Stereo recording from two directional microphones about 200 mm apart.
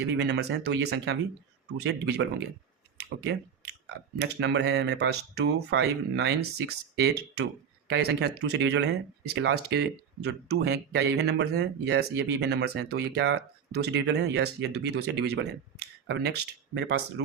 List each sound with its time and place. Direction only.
0.2 s speech: 60° right (ahead or behind)
3.0 s clicking: 55° right (ahead or behind)
4.2 s speech: 60° right (ahead or behind)